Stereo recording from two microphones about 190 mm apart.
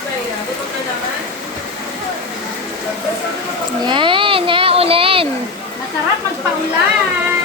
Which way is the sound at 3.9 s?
25° right (ahead or behind).